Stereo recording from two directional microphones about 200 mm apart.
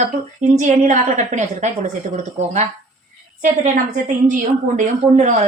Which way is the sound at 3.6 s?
40° right (ahead or behind).